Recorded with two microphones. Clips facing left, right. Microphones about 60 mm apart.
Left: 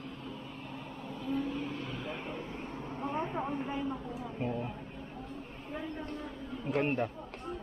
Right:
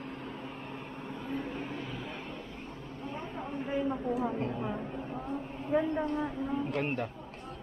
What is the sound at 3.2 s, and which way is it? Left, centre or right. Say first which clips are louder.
Vehicle: left 3 dB; centre.